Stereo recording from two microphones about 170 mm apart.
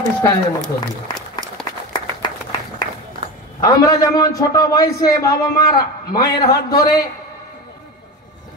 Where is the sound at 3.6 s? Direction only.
20° left (ahead or behind).